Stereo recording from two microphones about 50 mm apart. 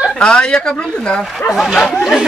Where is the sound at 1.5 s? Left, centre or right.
Centre.